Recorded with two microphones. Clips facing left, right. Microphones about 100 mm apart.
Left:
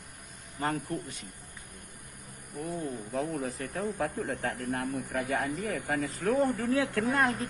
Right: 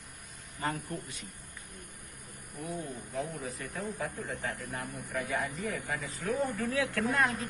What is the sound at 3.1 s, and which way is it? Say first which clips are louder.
Speech: left 4 dB; 55° left (ahead or behind).